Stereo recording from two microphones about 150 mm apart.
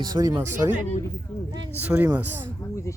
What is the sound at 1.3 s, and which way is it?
Speech, 10° left (ahead or behind).